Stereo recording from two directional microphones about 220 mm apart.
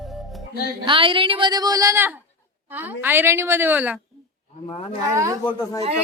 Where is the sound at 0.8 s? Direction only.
25° right (ahead or behind); by 4.0 s 5° right (ahead or behind).